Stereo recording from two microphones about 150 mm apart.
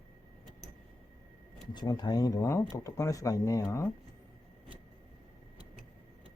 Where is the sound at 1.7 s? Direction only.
30° left (ahead or behind).